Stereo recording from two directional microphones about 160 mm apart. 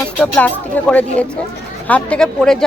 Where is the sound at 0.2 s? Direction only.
10° left (ahead or behind).